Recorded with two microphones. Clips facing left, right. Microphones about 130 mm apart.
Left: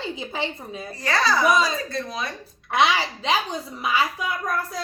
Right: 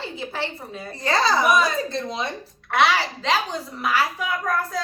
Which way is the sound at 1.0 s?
25° right (ahead or behind).